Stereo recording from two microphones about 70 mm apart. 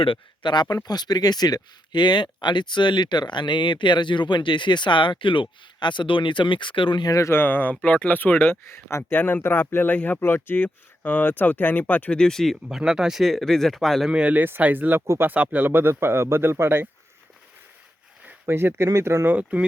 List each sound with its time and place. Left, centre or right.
0.4 s speech: left
6.6 s speech: left
7.2 s speech: left
7.4 s speech: left
8.6 s speech: left
12.2 s speech: centre
12.6 s speech: centre
14.1 s speech: centre
14.4 s speech: right
18.4 s speech: right
19.2 s speech: right